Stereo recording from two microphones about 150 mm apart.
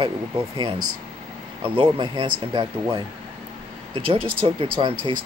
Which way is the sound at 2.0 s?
30° right (ahead or behind).